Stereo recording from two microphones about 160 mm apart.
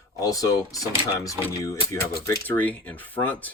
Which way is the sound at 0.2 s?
20° left (ahead or behind).